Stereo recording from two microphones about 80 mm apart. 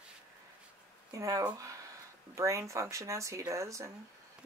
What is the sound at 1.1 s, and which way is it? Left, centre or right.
Speech, right.